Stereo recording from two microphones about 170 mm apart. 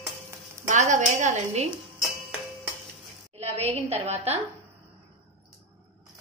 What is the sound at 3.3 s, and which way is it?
A woman's voice, 40° right (ahead or behind).